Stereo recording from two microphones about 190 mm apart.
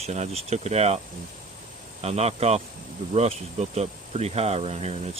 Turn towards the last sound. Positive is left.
turn(degrees=-35)  # may be behind; listen again after turning